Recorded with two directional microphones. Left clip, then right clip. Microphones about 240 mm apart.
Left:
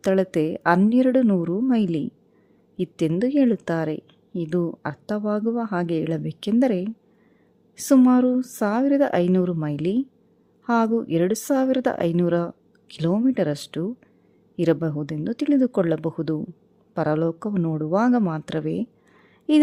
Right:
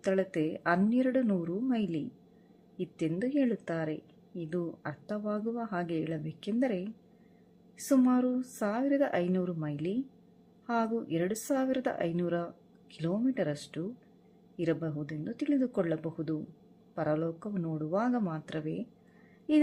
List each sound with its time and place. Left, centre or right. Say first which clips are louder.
0.0 s a woman's voice: left 9 dB; left